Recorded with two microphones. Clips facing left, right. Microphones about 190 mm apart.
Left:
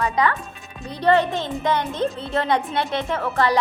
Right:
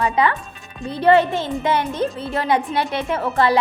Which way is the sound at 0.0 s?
15° right (ahead or behind).